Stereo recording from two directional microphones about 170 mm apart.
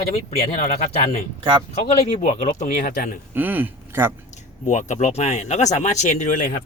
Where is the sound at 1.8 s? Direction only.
40° left (ahead or behind).